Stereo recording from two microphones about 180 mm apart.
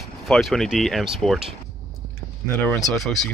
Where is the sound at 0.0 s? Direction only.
Centre (ahead or behind).